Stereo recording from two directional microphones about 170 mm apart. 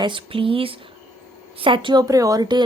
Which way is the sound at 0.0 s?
30° right (ahead or behind).